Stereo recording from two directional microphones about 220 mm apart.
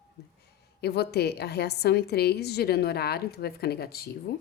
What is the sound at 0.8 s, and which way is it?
A woman's voice, 45° left (ahead or behind).